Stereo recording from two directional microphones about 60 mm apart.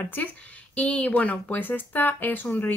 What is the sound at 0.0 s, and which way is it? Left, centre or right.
Speech, left.